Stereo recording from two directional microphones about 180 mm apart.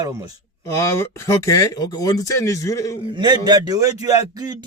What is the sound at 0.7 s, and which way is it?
Speech, 15° left (ahead or behind).